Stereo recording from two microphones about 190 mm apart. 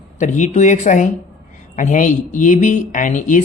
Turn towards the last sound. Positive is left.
turn(degrees=40)  # may be behind; listen again after turning